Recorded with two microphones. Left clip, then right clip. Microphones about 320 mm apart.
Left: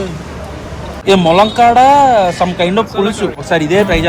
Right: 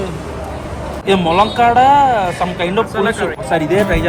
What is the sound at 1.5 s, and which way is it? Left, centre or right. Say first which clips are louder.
Speech: left 2 dB; centre.